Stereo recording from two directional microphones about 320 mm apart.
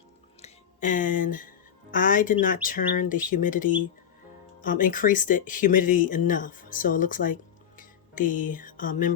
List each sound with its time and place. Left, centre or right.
0.4 s speech: left
7.8 s music: left